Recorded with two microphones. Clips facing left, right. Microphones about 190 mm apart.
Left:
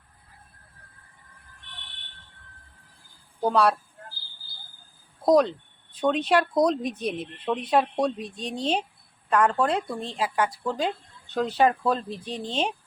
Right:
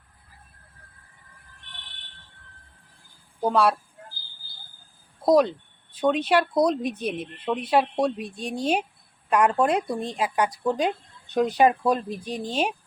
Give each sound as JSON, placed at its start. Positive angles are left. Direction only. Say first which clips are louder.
{"t": 3.4, "sound": "speech", "louder": "even", "side_deg": 0}
{"t": 5.2, "sound": "speech", "louder": "right 1 dB", "side_deg": -5}